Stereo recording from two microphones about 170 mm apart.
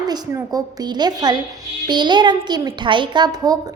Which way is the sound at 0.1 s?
25° right (ahead or behind).